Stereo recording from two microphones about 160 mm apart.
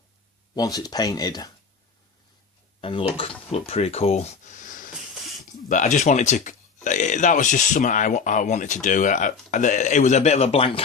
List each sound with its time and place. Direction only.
0.5 s speech: 25° left (ahead or behind)
2.8 s speech: 35° left (ahead or behind)